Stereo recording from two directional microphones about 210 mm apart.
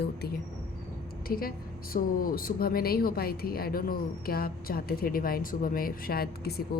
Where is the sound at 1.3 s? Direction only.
45° left (ahead or behind).